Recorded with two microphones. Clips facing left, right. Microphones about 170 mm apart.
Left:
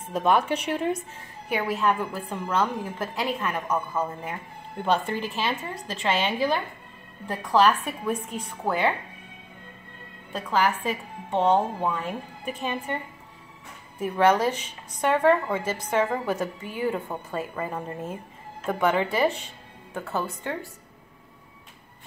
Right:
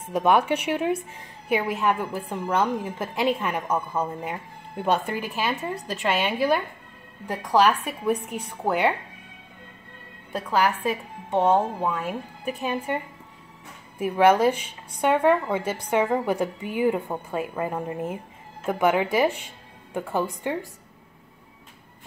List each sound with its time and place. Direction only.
0.0 s speech: 10° right (ahead or behind)
11.2 s speech: 10° right (ahead or behind)